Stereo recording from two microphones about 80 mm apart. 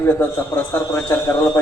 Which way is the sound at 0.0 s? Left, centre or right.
Left.